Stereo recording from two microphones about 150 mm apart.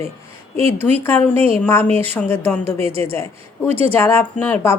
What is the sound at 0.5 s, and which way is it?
Speech, 40° right (ahead or behind).